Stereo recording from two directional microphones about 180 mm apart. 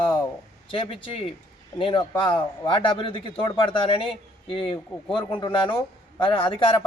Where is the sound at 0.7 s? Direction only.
30° left (ahead or behind).